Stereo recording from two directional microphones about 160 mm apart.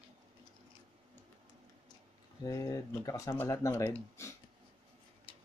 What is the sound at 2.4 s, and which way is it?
Speech, 20° left (ahead or behind).